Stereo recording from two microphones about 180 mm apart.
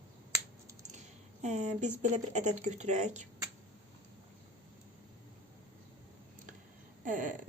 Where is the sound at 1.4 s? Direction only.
40° right (ahead or behind).